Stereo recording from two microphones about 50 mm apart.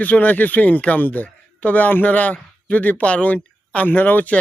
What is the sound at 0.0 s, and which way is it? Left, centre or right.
A man's voice, left.